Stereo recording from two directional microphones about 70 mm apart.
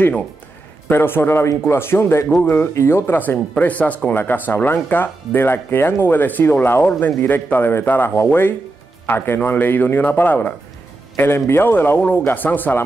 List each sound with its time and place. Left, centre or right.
0.8 s a man's voice: left
2.7 s a man's voice: left